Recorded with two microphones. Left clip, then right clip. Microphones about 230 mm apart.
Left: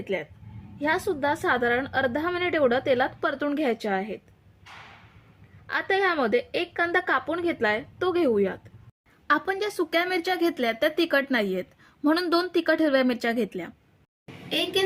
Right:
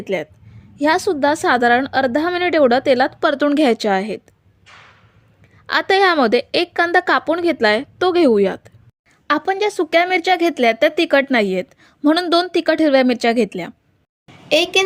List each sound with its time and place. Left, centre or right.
0.0 s a woman's voice: right
5.6 s a woman's voice: right
9.2 s a woman's voice: right